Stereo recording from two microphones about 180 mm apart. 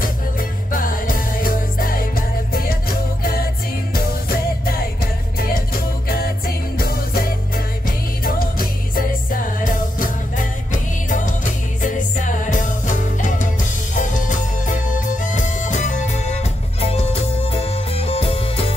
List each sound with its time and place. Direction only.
0.7 s music: 50° left (ahead or behind)
6.0 s music: 55° left (ahead or behind); by 18.7 s 30° left (ahead or behind)